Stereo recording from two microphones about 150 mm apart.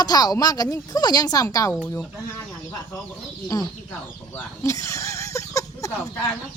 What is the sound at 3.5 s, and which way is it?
Speech, 20° left (ahead or behind).